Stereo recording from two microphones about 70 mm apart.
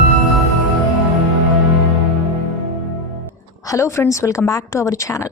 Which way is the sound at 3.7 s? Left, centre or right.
Left.